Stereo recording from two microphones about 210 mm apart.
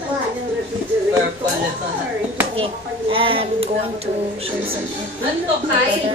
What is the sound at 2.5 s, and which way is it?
A child's voice, 25° right (ahead or behind).